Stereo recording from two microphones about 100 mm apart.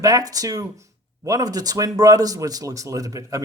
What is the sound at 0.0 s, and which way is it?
Speech, 35° right (ahead or behind).